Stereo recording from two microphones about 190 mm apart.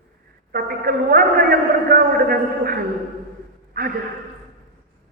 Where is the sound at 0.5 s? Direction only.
50° right (ahead or behind).